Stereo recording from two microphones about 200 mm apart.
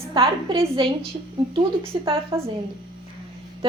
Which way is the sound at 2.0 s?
30° right (ahead or behind).